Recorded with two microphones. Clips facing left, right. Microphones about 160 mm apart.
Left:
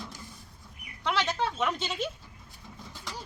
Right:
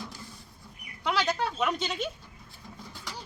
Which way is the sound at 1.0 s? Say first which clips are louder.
Right 1 dB; centre (ahead or behind).